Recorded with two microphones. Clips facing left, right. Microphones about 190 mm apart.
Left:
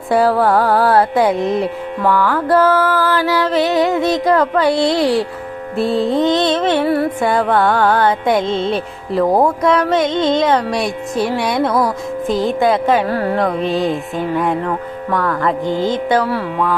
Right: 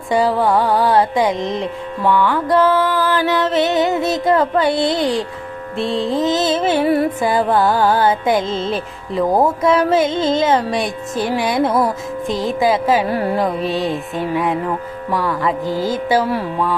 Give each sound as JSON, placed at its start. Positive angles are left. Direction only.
{"t": 0.1, "sound": "carnatic music", "side_deg": 5}
{"t": 7.3, "sound": "carnatic music", "side_deg": 0}
{"t": 11.7, "sound": "music", "side_deg": -25}
{"t": 12.3, "sound": "carnatic music", "side_deg": 0}
{"t": 13.1, "sound": "carnatic music", "side_deg": -15}
{"t": 13.4, "sound": "carnatic music", "side_deg": 0}